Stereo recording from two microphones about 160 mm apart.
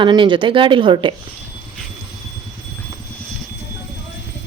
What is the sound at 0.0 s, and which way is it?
Speech, 30° right (ahead or behind).